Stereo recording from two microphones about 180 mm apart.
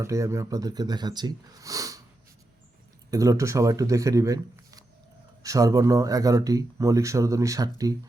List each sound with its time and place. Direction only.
0.0 s speech: 15° right (ahead or behind)
3.1 s speech: 20° right (ahead or behind)